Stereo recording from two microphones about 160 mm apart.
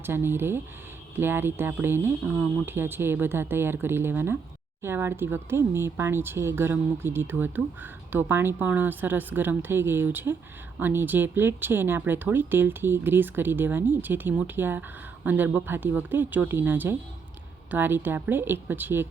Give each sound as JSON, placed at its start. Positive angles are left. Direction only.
{"t": 0.0, "sound": "speech", "side_deg": -15}